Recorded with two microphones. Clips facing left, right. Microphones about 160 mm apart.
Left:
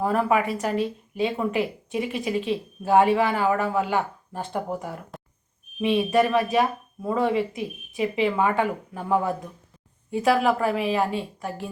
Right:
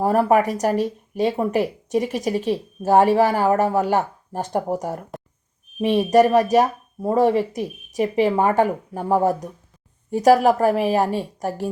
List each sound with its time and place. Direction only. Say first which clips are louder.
0.0 s a woman's voice: right 5 dB; 40° right (ahead or behind)